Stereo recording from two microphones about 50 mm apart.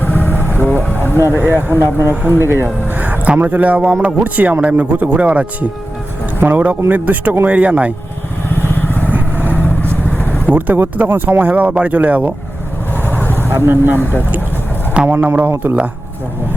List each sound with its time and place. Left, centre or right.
0.0 s vehicle: left
1.3 s speech: right
1.8 s speech: right
2.4 s speech: right
2.9 s music: right
3.2 s a man's voice: right
8.8 s vehicle: left
9.1 s vehicle: right
9.6 s vehicle: left
10.5 s a man's voice: right
13.0 s vehicle: left
13.7 s speech: right
15.0 s speech: right